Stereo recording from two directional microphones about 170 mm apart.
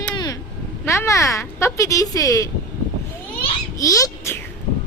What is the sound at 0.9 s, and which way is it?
Speech, 15° left (ahead or behind).